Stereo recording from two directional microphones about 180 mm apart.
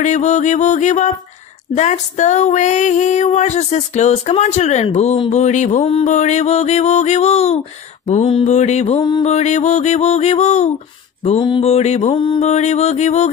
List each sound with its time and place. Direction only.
0.0 s female singing: 40° left (ahead or behind)